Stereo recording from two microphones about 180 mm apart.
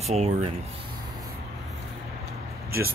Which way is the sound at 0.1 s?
40° right (ahead or behind).